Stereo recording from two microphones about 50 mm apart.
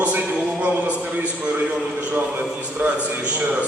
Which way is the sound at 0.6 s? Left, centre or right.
Right.